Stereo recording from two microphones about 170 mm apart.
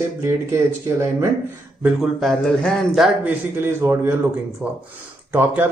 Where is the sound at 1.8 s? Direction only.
Centre (ahead or behind).